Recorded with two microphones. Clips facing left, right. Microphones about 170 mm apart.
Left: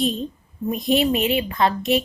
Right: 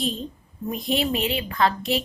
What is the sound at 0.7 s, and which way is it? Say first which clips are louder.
A woman's voice: left 5 dB; 20° left (ahead or behind).